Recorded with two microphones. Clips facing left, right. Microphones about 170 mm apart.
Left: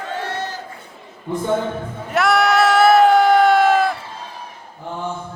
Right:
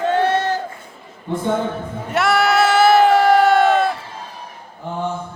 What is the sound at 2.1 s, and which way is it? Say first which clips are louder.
Sheep: even; centre (ahead or behind).